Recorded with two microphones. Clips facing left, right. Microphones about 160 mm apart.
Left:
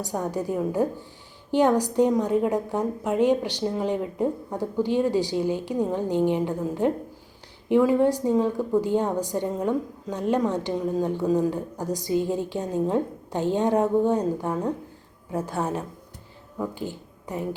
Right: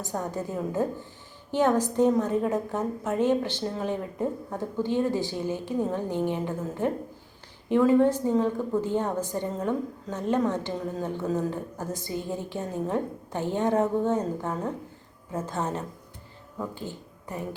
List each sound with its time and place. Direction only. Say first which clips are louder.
0.1 s a woman's voice: left 4 dB; 15° left (ahead or behind)